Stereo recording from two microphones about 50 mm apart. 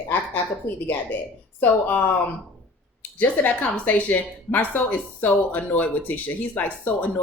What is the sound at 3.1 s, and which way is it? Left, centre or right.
A woman's voice, left.